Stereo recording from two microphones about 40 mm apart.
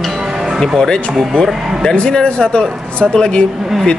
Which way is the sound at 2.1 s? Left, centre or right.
Left.